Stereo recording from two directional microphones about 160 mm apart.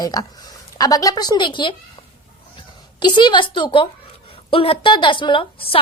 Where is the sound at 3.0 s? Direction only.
30° left (ahead or behind).